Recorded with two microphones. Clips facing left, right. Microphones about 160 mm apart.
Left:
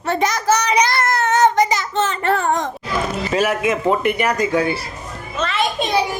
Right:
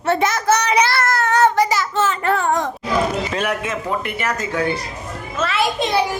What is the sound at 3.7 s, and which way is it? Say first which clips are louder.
Speech: left 6 dB; 20° left (ahead or behind).